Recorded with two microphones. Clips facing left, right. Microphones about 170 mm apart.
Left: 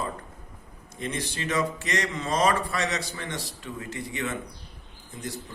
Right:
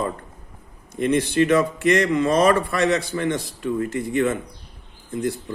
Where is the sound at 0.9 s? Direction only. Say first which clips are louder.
Right 14 dB; 60° right (ahead or behind).